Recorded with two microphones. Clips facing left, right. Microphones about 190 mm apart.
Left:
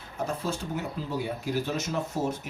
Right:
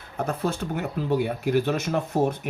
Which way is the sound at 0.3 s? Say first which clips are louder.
Right 5 dB; 60° right (ahead or behind).